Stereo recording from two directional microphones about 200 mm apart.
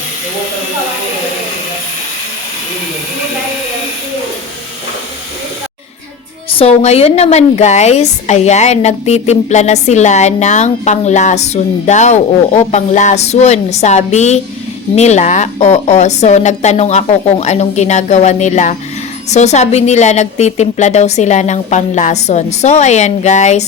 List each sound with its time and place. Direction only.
6.5 s a woman's voice: 30° left (ahead or behind)